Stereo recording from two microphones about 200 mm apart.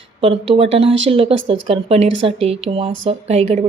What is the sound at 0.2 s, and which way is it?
Speech, 30° right (ahead or behind).